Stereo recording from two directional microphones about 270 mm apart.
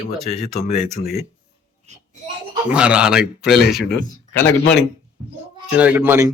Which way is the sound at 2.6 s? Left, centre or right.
Centre.